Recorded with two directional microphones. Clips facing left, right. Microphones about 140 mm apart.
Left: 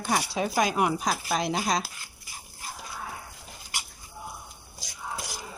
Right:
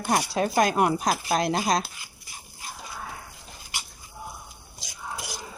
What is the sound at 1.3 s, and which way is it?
Speech, 40° right (ahead or behind).